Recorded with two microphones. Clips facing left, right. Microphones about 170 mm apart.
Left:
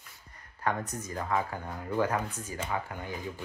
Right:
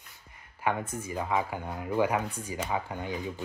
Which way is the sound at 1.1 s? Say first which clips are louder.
Right 1 dB; 10° right (ahead or behind).